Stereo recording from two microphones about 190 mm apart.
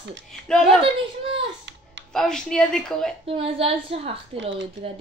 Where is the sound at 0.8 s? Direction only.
30° right (ahead or behind).